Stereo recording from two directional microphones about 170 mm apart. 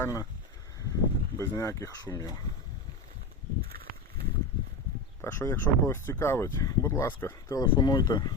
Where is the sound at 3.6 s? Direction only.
65° right (ahead or behind).